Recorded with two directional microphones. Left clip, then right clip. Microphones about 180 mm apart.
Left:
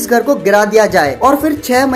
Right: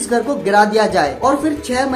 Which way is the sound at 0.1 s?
30° left (ahead or behind).